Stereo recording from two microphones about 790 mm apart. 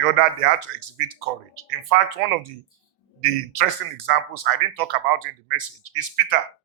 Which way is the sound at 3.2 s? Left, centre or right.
Right.